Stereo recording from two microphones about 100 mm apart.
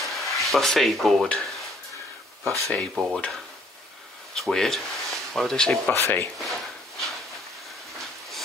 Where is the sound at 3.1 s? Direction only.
5° left (ahead or behind).